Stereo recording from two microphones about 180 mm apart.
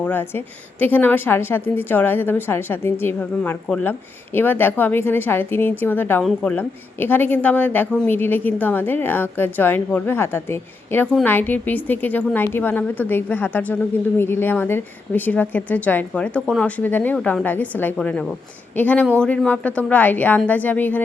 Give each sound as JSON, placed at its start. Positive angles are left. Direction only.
{"t": 0.0, "sound": "a woman's voice", "side_deg": 10}